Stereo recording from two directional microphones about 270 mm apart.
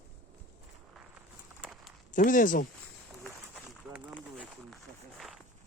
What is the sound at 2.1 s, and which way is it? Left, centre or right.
Speech, left.